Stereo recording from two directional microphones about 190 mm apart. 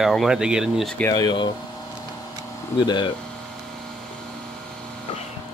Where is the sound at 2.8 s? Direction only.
25° left (ahead or behind).